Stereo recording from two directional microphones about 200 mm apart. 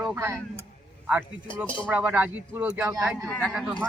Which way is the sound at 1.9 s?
10° right (ahead or behind).